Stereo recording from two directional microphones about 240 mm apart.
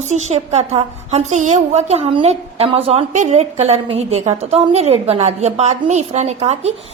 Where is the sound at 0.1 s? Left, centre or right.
Right.